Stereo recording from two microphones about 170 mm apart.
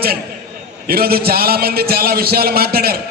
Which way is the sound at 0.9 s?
60° right (ahead or behind).